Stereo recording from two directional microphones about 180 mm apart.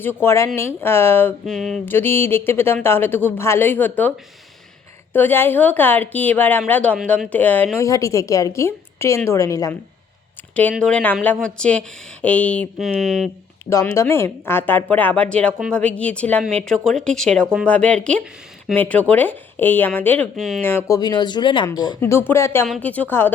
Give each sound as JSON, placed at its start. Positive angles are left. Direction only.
{"t": 0.0, "sound": "speech", "side_deg": 10}
{"t": 1.5, "sound": "speech", "side_deg": 0}
{"t": 1.9, "sound": "speech", "side_deg": 10}
{"t": 5.1, "sound": "speech", "side_deg": 10}
{"t": 13.7, "sound": "speech", "side_deg": 15}
{"t": 20.6, "sound": "speech", "side_deg": 10}